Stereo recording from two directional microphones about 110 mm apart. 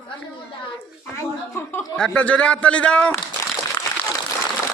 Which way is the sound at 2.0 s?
10° left (ahead or behind).